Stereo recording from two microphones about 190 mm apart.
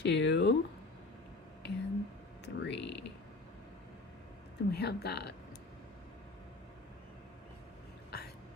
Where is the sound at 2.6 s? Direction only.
65° left (ahead or behind).